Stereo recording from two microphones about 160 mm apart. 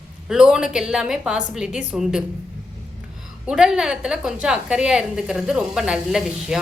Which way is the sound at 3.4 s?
5° right (ahead or behind).